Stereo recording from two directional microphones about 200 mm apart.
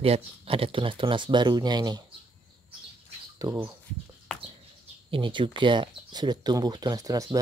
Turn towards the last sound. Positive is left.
turn(degrees=-20)  # may be behind; listen again after turning